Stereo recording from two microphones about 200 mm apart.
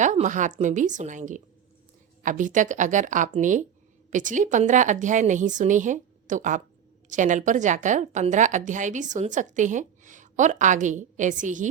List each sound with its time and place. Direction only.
0.0 s a woman's voice: 40° right (ahead or behind)